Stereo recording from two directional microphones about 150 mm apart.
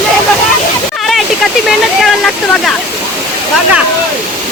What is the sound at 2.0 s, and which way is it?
Speech, centre (ahead or behind).